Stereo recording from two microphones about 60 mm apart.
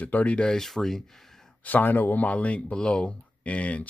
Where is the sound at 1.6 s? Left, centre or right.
Left.